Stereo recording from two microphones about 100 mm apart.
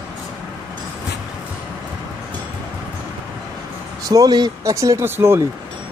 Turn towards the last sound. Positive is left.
turn(degrees=-25)  # may be behind; listen again after turning